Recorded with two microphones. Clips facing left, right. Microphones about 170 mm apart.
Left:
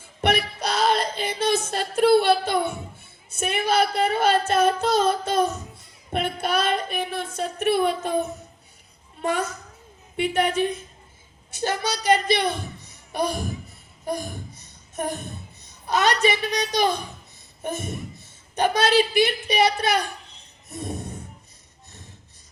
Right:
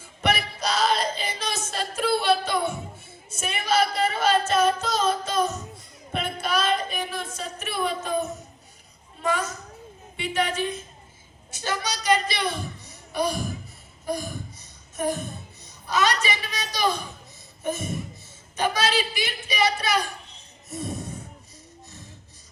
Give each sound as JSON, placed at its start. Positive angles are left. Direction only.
{"t": 0.2, "sound": "music", "side_deg": 55}
{"t": 3.3, "sound": "speech", "side_deg": 55}
{"t": 6.1, "sound": "a sound", "side_deg": 55}
{"t": 9.2, "sound": "speech", "side_deg": 55}
{"t": 14.1, "sound": "a sound", "side_deg": 60}
{"t": 15.9, "sound": "speech", "side_deg": 55}
{"t": 17.6, "sound": "a sound", "side_deg": 55}
{"t": 18.5, "sound": "speech", "side_deg": 55}
{"t": 20.7, "sound": "snort", "side_deg": 55}